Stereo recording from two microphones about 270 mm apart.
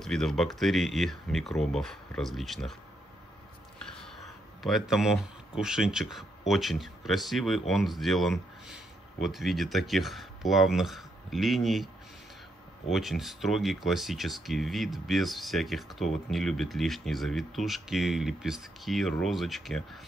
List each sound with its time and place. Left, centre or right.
0.0 s speech: centre
3.8 s speech: centre
12.9 s speech: centre